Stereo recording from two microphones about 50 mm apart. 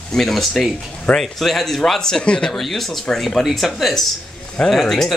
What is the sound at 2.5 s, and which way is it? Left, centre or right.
Speech, centre.